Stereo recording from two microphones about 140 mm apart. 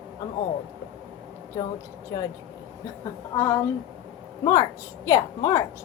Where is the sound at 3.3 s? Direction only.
20° left (ahead or behind).